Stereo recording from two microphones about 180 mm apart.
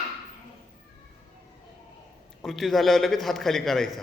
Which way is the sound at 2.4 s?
Centre (ahead or behind).